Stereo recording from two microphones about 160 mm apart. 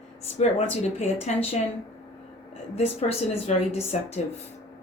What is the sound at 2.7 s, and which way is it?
Speech, 40° left (ahead or behind).